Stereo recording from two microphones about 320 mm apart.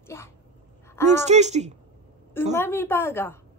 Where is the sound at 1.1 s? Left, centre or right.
Right.